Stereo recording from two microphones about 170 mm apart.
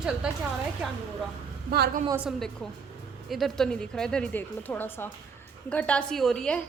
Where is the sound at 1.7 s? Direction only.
70° right (ahead or behind).